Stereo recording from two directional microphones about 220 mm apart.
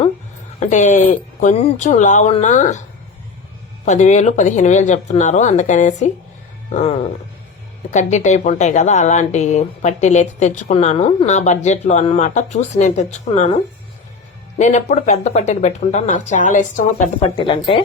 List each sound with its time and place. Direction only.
0.6 s speech: 35° left (ahead or behind)
3.8 s speech: 30° left (ahead or behind)
14.6 s speech: 30° left (ahead or behind)
17.4 s speech: 20° left (ahead or behind)